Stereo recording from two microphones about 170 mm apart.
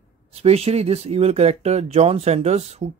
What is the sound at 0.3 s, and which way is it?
Speech, 35° right (ahead or behind).